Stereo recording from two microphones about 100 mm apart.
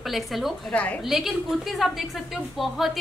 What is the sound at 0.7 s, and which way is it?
Speech, 15° left (ahead or behind).